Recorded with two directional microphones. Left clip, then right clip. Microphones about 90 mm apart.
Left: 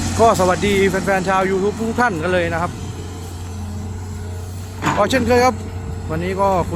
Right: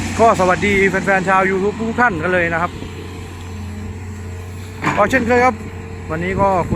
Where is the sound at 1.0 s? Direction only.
10° left (ahead or behind).